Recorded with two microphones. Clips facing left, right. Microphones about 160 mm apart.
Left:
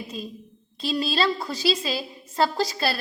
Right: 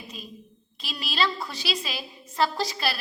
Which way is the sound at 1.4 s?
25° left (ahead or behind).